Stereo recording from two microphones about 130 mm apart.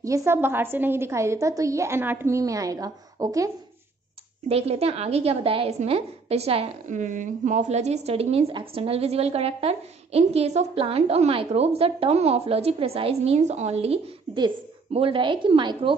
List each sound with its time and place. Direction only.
0.0 s a woman's voice: 20° right (ahead or behind)
4.5 s a woman's voice: 50° right (ahead or behind)
6.9 s a woman's voice: 75° right (ahead or behind); by 15.9 s 40° right (ahead or behind)